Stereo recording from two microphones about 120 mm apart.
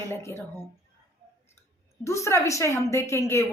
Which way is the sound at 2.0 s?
25° left (ahead or behind).